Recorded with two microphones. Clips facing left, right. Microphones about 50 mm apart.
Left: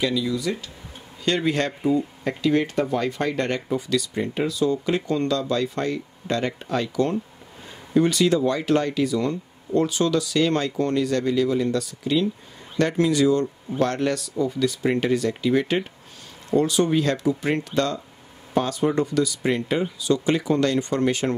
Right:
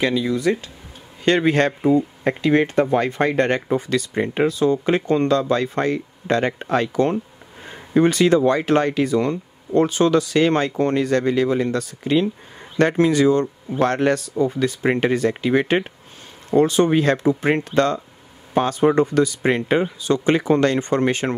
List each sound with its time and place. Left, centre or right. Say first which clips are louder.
0.0 s speech: right 4 dB; right